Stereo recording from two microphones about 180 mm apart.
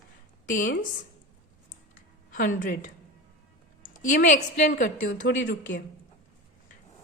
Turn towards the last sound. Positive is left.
turn(degrees=50)  # may be behind; listen again after turning